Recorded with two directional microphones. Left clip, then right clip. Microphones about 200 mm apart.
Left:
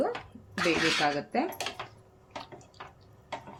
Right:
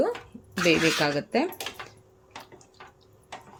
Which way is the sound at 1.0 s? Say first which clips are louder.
Right 3 dB; 45° right (ahead or behind).